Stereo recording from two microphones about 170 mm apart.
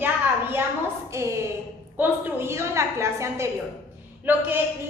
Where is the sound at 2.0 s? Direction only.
15° right (ahead or behind).